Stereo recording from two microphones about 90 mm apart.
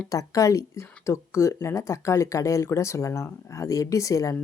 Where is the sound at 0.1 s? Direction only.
40° left (ahead or behind).